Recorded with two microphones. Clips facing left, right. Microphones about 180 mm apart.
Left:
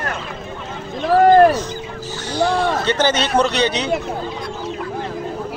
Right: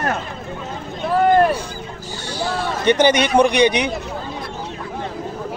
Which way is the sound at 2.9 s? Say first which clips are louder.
Right 3 dB; 15° right (ahead or behind).